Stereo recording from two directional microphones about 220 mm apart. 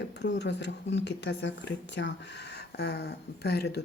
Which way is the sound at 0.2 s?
50° left (ahead or behind).